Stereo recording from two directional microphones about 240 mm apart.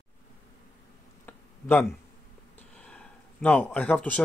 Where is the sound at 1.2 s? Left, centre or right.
Centre.